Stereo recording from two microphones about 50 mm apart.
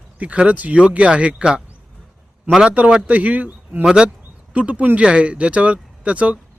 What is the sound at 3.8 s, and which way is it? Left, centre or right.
Speech, centre.